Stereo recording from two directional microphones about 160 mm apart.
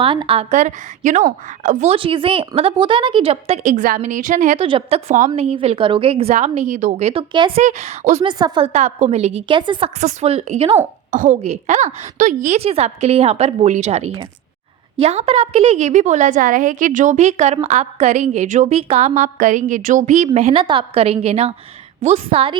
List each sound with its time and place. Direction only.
0.0 s a woman's voice: 35° right (ahead or behind)
2.0 s a woman's voice: 35° right (ahead or behind); by 4.6 s 50° right (ahead or behind)
4.6 s a woman's voice: 35° right (ahead or behind)
7.6 s a woman's voice: 45° right (ahead or behind)
8.2 s a woman's voice: 25° right (ahead or behind)
8.6 s a woman's voice: 45° right (ahead or behind)
10.0 s a woman's voice: 50° right (ahead or behind)
11.1 s a woman's voice: 50° right (ahead or behind)